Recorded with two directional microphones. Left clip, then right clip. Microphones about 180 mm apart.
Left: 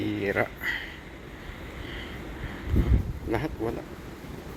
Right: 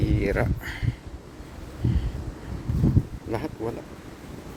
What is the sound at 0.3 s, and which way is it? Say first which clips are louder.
Speech: even; 25° right (ahead or behind).